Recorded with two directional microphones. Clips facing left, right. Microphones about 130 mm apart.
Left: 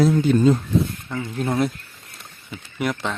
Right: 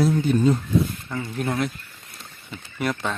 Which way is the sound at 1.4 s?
25° left (ahead or behind).